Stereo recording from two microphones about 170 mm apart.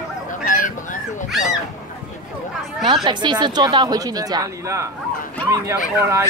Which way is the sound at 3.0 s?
25° right (ahead or behind).